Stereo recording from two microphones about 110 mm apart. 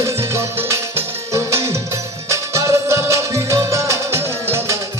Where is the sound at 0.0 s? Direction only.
25° right (ahead or behind).